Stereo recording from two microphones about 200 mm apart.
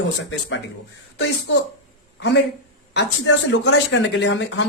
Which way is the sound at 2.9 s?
60° left (ahead or behind).